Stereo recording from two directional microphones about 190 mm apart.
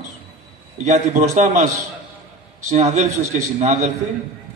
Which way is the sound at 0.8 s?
40° right (ahead or behind).